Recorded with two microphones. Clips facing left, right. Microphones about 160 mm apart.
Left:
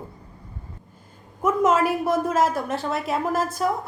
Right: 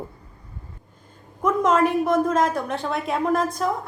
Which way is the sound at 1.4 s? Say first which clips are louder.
Even; 5° left (ahead or behind).